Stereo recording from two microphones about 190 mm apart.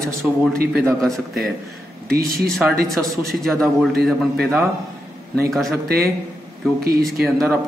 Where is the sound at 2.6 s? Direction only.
5° right (ahead or behind).